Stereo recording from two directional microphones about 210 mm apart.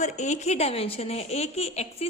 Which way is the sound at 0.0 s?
35° left (ahead or behind).